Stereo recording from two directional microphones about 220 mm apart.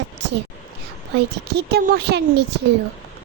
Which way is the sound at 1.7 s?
45° right (ahead or behind).